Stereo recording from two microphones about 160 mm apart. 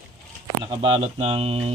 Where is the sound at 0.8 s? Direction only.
40° right (ahead or behind).